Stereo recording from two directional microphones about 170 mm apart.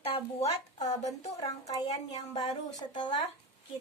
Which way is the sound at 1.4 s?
20° left (ahead or behind).